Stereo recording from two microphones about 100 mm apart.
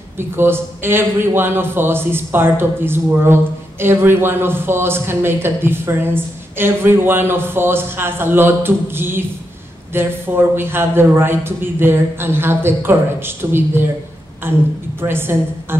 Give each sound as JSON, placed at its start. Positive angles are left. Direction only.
{"t": 0.2, "sound": "speech", "side_deg": -25}